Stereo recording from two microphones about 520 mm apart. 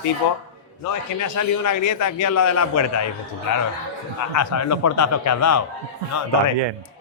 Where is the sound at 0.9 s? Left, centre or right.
Left.